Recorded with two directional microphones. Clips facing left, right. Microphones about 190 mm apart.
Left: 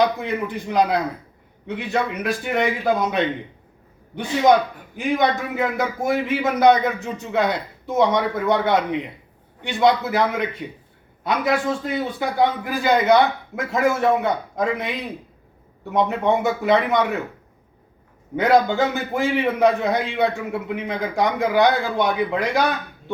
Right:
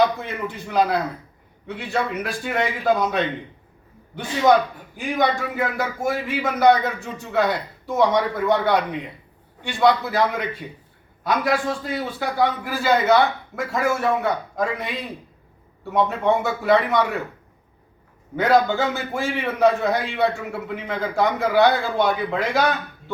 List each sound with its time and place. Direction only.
0.5 s a man's voice: 15° left (ahead or behind)
4.9 s a man's voice: 20° left (ahead or behind)
18.3 s a man's voice: 20° left (ahead or behind)